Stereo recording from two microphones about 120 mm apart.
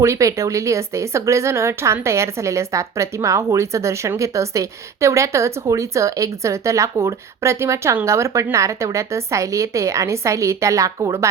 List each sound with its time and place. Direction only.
0.0 s speech: 25° right (ahead or behind)